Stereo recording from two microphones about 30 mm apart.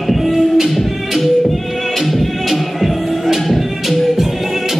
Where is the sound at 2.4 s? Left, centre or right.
Centre.